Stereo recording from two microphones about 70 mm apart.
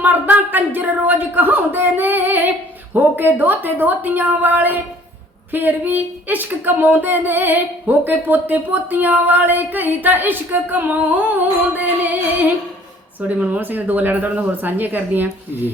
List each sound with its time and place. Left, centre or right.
0.0 s speech: right
13.2 s speech: right